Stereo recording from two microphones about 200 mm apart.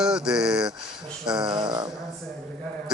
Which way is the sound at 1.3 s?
20° right (ahead or behind).